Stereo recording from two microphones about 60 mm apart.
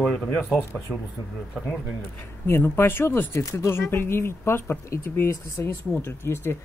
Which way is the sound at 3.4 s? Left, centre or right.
Left.